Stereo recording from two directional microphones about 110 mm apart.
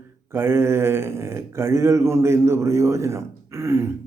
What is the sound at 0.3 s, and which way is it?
Speech, 20° right (ahead or behind).